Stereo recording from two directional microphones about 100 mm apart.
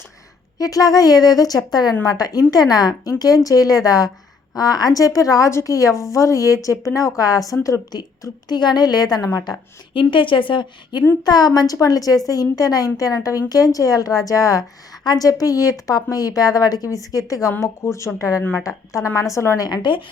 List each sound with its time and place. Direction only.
0.6 s speech: 35° left (ahead or behind)
9.9 s a woman's voice: 55° left (ahead or behind)